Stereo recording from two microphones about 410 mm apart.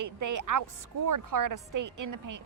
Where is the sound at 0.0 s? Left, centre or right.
Right.